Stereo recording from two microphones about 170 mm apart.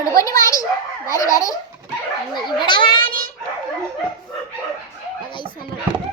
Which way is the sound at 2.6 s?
25° left (ahead or behind).